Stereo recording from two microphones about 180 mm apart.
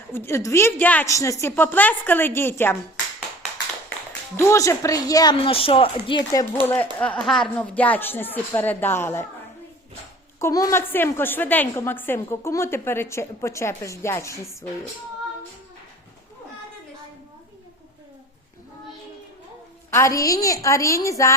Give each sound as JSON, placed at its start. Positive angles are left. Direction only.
{"t": 0.1, "sound": "a woman's voice", "side_deg": 15}
{"t": 4.4, "sound": "a woman's voice", "side_deg": 15}
{"t": 6.6, "sound": "a woman's voice", "side_deg": 10}
{"t": 10.4, "sound": "a woman's voice", "side_deg": 20}
{"t": 19.9, "sound": "a woman's voice", "side_deg": 15}